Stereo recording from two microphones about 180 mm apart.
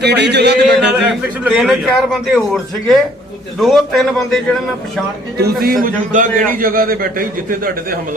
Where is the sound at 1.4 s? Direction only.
Centre (ahead or behind).